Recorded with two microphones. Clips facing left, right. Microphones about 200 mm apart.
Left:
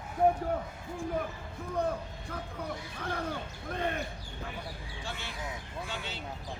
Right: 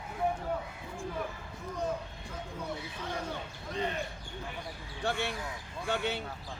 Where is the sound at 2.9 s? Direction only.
55° left (ahead or behind).